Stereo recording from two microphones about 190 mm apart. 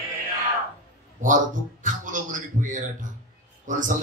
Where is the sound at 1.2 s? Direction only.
40° right (ahead or behind).